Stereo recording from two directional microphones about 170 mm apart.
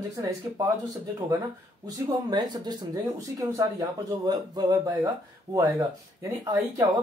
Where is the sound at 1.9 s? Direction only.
25° right (ahead or behind).